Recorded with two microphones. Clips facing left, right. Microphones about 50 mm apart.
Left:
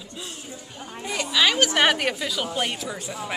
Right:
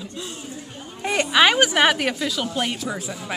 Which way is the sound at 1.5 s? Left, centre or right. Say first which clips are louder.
Right 3 dB; centre.